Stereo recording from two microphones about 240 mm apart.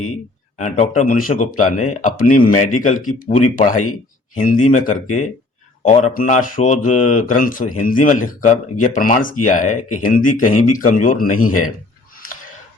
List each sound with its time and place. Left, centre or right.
0.5 s speech: left
10.4 s speech: left
10.7 s speech: left